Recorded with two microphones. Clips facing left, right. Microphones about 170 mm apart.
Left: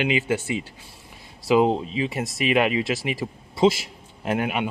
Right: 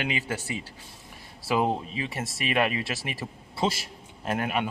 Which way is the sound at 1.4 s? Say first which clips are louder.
Left 7 dB; 15° left (ahead or behind).